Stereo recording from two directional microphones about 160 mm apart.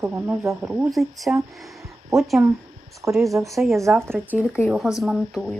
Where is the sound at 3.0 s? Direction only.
20° right (ahead or behind).